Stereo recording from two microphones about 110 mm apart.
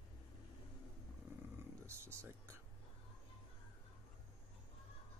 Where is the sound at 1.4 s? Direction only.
20° right (ahead or behind).